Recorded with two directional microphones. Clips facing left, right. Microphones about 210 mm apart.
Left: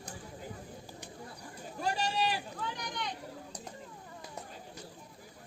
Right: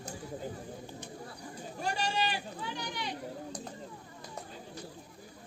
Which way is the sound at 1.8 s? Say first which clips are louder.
Left 1 dB; 5° left (ahead or behind).